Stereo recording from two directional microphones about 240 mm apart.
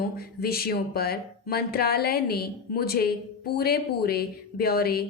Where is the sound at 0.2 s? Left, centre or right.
Left.